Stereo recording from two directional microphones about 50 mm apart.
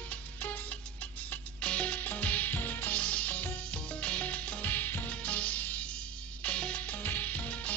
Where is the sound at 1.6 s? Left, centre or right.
Left.